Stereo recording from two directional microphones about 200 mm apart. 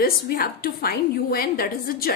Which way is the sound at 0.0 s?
45° left (ahead or behind).